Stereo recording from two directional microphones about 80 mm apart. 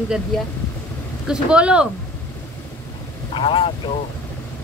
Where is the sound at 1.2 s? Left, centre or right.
Centre.